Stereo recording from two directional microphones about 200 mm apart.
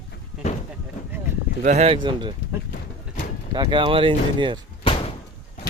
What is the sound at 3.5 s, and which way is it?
A man's voice, 20° right (ahead or behind).